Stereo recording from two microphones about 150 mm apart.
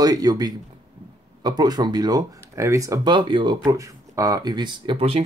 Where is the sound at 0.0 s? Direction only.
25° right (ahead or behind).